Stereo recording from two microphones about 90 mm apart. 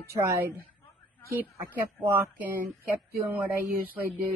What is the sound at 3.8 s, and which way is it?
Speech, 20° right (ahead or behind).